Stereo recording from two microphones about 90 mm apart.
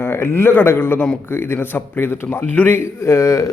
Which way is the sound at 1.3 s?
25° left (ahead or behind).